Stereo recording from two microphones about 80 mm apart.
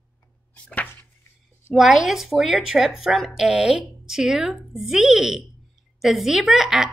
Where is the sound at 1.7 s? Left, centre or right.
Centre.